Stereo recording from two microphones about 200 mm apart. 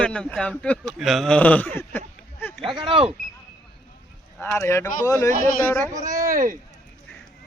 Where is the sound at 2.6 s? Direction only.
25° right (ahead or behind).